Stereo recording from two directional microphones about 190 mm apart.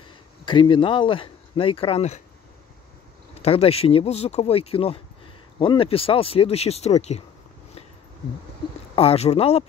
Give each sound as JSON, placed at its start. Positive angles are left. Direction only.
{"t": 0.5, "sound": "speech", "side_deg": 25}
{"t": 3.4, "sound": "speech", "side_deg": 30}
{"t": 8.9, "sound": "speech", "side_deg": 30}